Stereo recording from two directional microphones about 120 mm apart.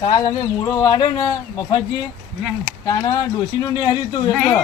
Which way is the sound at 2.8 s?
30° left (ahead or behind).